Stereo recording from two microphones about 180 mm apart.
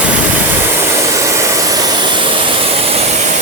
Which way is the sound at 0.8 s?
15° right (ahead or behind).